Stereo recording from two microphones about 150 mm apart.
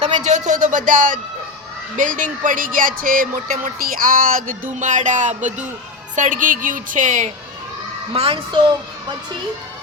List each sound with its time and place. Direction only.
0.0 s speech: 50° right (ahead or behind)
2.0 s a sound: 60° right (ahead or behind)
4.8 s speech: 60° right (ahead or behind)
8.1 s a woman's voice: 40° right (ahead or behind)